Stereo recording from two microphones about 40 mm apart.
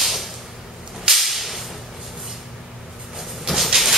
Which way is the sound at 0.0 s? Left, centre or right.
Centre.